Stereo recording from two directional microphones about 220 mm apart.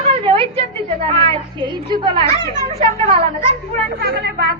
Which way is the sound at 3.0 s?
30° right (ahead or behind).